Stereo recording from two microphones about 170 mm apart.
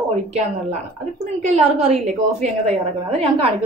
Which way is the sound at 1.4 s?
40° right (ahead or behind).